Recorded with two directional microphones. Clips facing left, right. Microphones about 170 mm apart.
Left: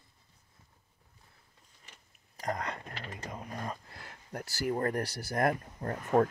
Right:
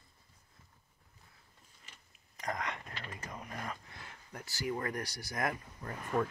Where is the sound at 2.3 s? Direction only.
30° left (ahead or behind).